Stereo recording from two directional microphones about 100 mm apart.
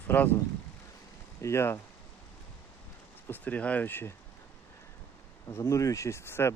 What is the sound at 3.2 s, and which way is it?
Speech, 15° left (ahead or behind).